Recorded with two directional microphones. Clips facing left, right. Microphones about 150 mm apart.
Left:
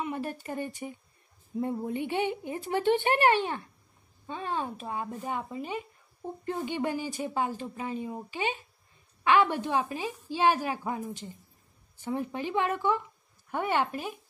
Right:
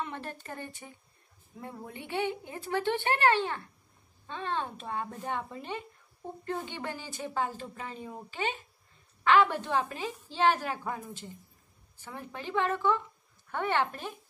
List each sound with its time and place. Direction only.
0.0 s speech: 10° left (ahead or behind)